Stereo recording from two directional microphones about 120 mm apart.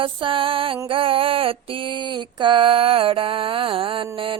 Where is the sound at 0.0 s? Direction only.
45° right (ahead or behind).